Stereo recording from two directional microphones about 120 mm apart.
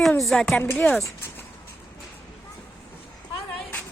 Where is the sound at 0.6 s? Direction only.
15° left (ahead or behind).